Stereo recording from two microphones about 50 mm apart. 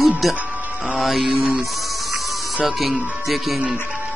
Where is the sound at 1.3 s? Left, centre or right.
Right.